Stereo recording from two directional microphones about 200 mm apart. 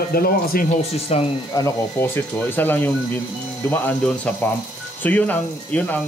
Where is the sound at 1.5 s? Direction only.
15° left (ahead or behind).